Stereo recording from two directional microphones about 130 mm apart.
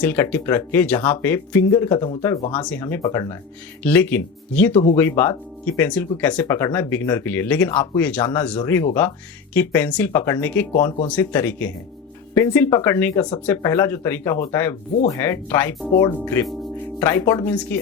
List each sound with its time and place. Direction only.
0.0 s speech: 10° left (ahead or behind)
2.8 s speech: 20° left (ahead or behind)